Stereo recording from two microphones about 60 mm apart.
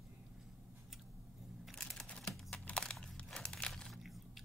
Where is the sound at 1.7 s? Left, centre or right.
Centre.